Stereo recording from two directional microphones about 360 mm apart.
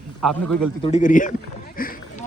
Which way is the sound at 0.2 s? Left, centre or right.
Centre.